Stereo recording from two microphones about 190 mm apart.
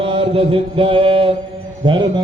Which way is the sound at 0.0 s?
25° right (ahead or behind).